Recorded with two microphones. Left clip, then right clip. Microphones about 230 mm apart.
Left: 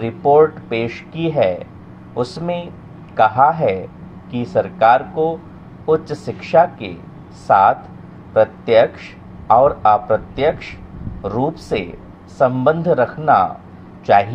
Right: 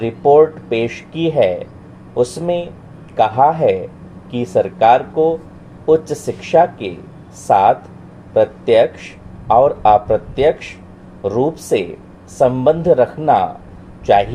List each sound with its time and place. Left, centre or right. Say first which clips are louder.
0.0 s speech: right 2 dB; left